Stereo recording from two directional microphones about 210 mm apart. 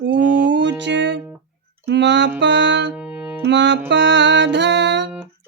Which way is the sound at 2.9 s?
5° right (ahead or behind).